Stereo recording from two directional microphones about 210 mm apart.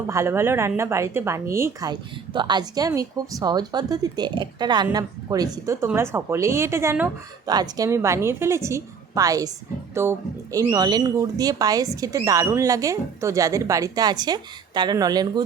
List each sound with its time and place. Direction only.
0.1 s a woman's voice: 15° right (ahead or behind)